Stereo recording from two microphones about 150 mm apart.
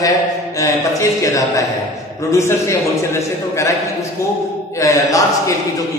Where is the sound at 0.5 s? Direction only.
20° left (ahead or behind).